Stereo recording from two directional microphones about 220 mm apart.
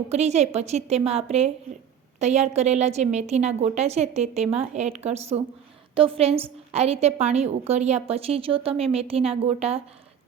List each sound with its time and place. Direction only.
0.1 s a woman's voice: 30° right (ahead or behind)